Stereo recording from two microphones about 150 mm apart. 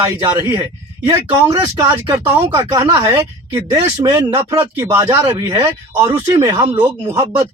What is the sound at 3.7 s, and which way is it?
Speech, 35° right (ahead or behind).